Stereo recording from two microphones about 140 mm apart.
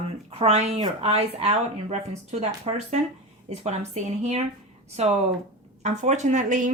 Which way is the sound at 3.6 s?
55° right (ahead or behind).